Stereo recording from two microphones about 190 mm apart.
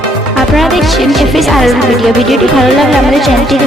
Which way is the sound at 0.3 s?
Centre (ahead or behind).